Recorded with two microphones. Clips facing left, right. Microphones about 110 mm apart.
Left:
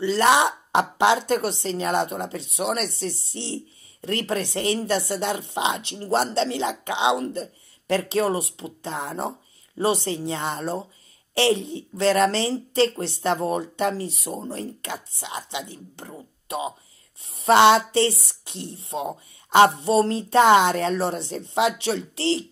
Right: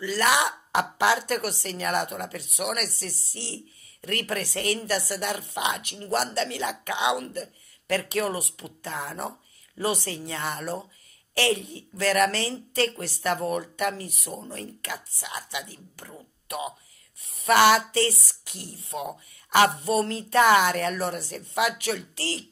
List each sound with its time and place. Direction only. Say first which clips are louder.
0.0 s speech: left 5 dB; 25° left (ahead or behind)